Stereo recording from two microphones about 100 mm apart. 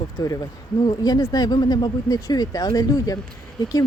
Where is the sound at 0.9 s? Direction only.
40° left (ahead or behind).